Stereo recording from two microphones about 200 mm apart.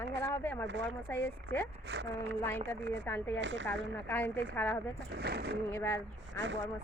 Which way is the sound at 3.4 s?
65° right (ahead or behind).